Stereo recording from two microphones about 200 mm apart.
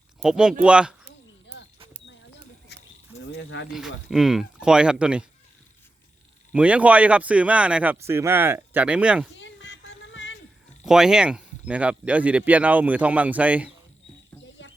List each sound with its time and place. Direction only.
0.2 s speech: 5° right (ahead or behind)
2.6 s cricket: 55° left (ahead or behind)
3.7 s speech: centre (ahead or behind)
6.5 s speech: 5° right (ahead or behind)
9.3 s music: 65° left (ahead or behind)
10.8 s speech: 5° right (ahead or behind)